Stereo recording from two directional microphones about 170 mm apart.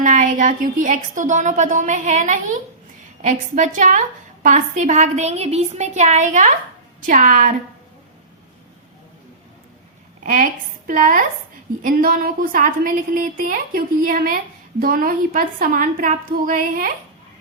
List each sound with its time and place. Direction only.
0.0 s a woman's voice: 45° right (ahead or behind)
10.2 s a woman's voice: 50° right (ahead or behind)